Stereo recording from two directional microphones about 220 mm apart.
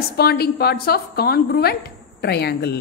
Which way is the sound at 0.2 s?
45° left (ahead or behind).